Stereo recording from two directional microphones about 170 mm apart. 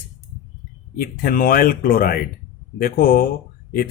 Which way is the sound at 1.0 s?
60° left (ahead or behind).